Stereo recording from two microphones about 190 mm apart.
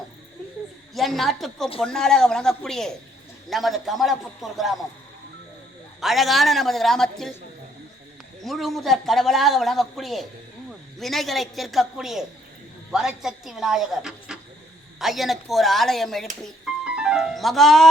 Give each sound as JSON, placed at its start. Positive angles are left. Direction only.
{"t": 0.9, "sound": "a man's voice", "side_deg": 0}
{"t": 6.0, "sound": "a man's voice", "side_deg": 0}
{"t": 8.4, "sound": "a man's voice", "side_deg": 0}